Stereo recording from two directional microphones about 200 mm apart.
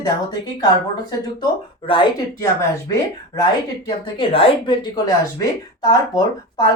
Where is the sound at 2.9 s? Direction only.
15° left (ahead or behind).